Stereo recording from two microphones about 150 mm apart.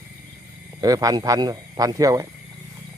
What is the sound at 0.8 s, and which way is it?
Speech, 25° right (ahead or behind).